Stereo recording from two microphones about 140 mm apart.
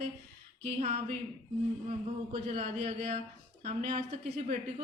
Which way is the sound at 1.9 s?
45° right (ahead or behind).